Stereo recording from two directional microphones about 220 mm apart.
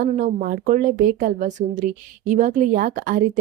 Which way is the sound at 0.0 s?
35° right (ahead or behind).